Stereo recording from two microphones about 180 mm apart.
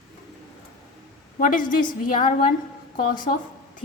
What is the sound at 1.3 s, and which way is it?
A woman's voice, 45° left (ahead or behind).